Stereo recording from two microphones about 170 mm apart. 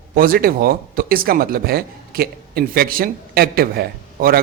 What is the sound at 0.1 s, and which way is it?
Speech, 60° right (ahead or behind).